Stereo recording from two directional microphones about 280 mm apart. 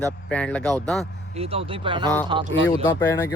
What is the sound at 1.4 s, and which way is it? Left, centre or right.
Speech, centre.